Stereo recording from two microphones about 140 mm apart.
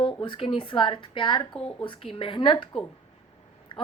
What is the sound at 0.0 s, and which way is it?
Speech, 40° left (ahead or behind).